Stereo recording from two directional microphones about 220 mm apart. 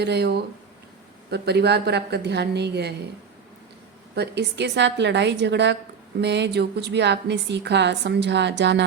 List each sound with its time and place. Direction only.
0.0 s a woman's voice: 50° right (ahead or behind)
4.1 s a woman's voice: 50° right (ahead or behind)